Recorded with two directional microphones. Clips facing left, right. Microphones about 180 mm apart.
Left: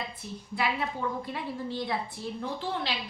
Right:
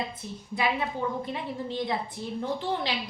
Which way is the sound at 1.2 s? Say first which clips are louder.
Right 2 dB; 20° right (ahead or behind).